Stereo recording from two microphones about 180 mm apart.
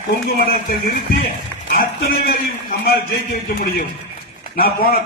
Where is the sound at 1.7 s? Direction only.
55° left (ahead or behind).